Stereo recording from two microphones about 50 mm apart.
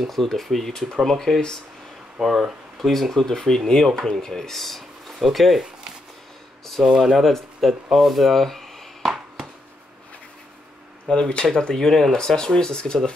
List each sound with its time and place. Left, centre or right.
0.0 s speech: centre
2.2 s speech: centre
6.8 s speech: centre
7.2 s a sound: centre
11.1 s speech: centre